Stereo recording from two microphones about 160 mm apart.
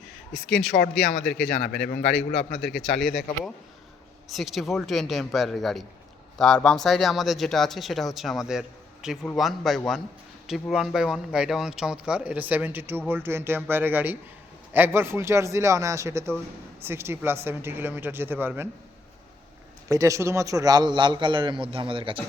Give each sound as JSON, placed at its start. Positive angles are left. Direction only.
{"t": 0.4, "sound": "speech", "side_deg": 0}
{"t": 19.9, "sound": "a man's voice", "side_deg": -20}